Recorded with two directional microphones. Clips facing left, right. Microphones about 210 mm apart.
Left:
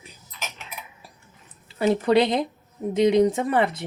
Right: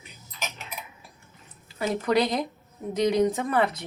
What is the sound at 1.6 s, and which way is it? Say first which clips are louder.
Speech: left 6 dB; 30° left (ahead or behind).